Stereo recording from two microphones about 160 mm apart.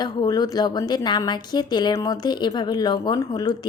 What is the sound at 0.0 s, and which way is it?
Speech, 25° left (ahead or behind).